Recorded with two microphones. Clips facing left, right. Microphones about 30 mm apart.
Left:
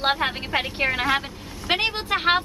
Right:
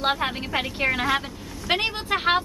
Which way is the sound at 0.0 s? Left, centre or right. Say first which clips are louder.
Left 1 dB; centre.